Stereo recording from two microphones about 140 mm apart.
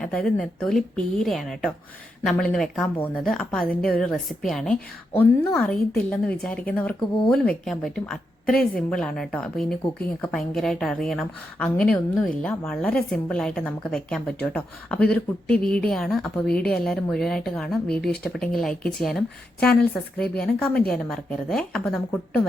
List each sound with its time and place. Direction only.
0.0 s a woman's voice: 5° left (ahead or behind)